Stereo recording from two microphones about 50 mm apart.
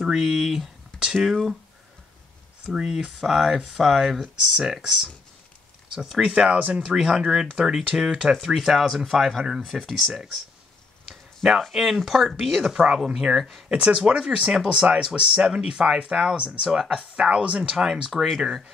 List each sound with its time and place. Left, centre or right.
0.0 s speech: centre
2.7 s speech: centre
6.5 s speech: centre
11.1 s a sound: centre
11.7 s speech: centre
13.7 s speech: centre
16.6 s speech: centre
17.0 s speech: right
18.1 s speech: centre